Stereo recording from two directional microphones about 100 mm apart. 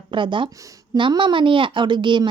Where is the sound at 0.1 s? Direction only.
55° right (ahead or behind).